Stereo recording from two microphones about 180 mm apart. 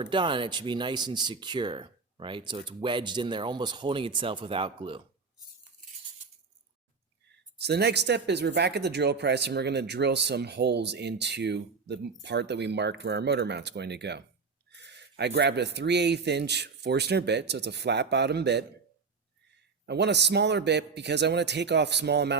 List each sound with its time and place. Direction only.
0.0 s speech: 25° right (ahead or behind)
7.6 s speech: 65° right (ahead or behind)
19.8 s speech: 70° right (ahead or behind)